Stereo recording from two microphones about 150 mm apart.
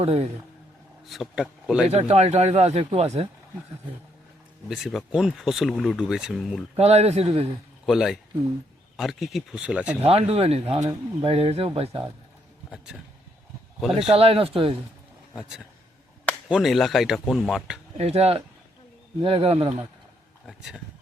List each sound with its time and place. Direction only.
0.0 s speech: 40° right (ahead or behind)
1.0 s speech: centre (ahead or behind)
1.9 s speech: 45° right (ahead or behind)
4.7 s speech: centre (ahead or behind)
6.7 s speech: 45° right (ahead or behind)
7.9 s speech: centre (ahead or behind)
10.0 s speech: 40° right (ahead or behind)
10.8 s speech: 25° right (ahead or behind)
11.3 s speech: 40° right (ahead or behind)
12.7 s speech: 5° right (ahead or behind)
13.9 s speech: 40° right (ahead or behind)
15.4 s speech: 5° right (ahead or behind)
17.9 s speech: 45° right (ahead or behind)
20.5 s speech: 5° right (ahead or behind)